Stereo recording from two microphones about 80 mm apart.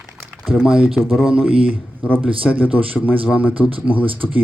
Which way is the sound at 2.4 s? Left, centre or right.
Centre.